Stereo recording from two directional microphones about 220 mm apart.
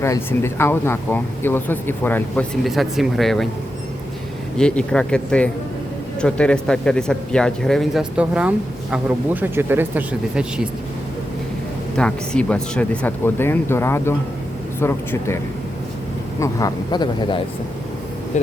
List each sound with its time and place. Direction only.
0.0 s speech: 10° left (ahead or behind)
4.5 s speech: 5° left (ahead or behind)
11.9 s speech: 5° left (ahead or behind)
16.4 s speech: 15° left (ahead or behind)